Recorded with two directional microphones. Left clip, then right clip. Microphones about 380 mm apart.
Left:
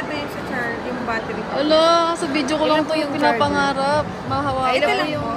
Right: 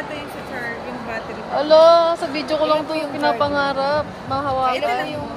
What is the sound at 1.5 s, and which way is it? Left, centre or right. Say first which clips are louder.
Speech: right 4 dB; centre.